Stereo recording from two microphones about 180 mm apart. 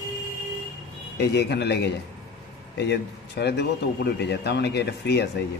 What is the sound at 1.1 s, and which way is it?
A man's voice, 70° left (ahead or behind).